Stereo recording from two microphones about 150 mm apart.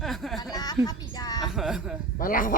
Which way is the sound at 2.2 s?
65° left (ahead or behind).